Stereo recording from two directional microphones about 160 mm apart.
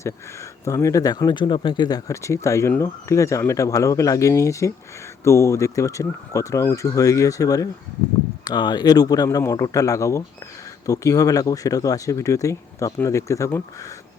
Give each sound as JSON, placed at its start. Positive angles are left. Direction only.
{"t": 0.6, "sound": "speech", "side_deg": 20}